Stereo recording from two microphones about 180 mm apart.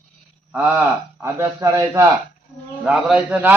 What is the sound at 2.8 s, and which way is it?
Speech, 5° right (ahead or behind).